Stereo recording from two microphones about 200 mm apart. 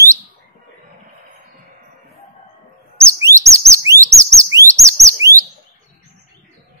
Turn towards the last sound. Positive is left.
turn(degrees=-15)  # may be behind; listen again after turning